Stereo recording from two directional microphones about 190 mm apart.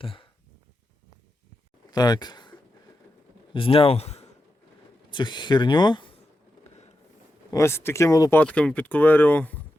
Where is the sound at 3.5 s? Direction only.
30° left (ahead or behind).